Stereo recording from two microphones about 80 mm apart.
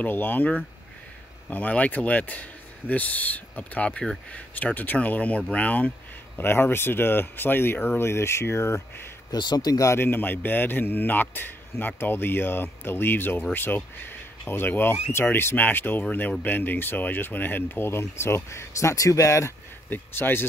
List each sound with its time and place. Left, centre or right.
0.0 s a man's voice: left
9.3 s speech: left
9.7 s speech: left
9.9 s a man's voice: left
19.9 s a man's voice: left